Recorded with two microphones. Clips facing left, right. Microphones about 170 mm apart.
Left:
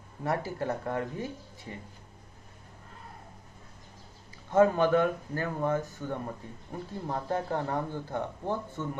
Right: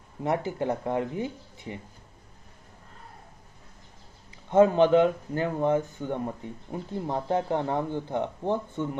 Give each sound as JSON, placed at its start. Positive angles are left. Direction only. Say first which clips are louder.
{"t": 0.2, "sound": "speech", "louder": "right 4 dB", "side_deg": -20}
{"t": 4.5, "sound": "speech", "louder": "right 4 dB", "side_deg": -20}